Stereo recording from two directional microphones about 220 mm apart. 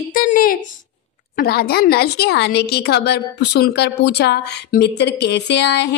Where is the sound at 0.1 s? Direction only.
40° left (ahead or behind).